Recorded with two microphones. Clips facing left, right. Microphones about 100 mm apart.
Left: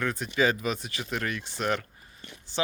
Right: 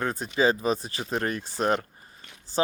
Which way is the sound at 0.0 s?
35° right (ahead or behind).